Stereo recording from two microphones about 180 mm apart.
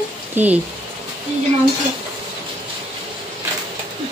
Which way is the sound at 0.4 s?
10° right (ahead or behind).